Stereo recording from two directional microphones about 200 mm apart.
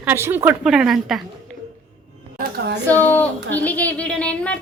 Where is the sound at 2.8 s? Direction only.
10° left (ahead or behind).